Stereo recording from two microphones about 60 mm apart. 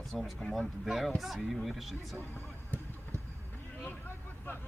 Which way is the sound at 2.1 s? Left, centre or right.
Left.